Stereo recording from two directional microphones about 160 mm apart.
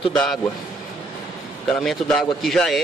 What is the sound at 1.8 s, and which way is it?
Speech, centre (ahead or behind).